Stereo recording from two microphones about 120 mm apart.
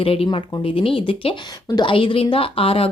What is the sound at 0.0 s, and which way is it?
Speech, 50° left (ahead or behind).